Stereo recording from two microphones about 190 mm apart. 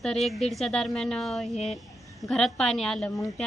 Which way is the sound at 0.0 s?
Centre (ahead or behind).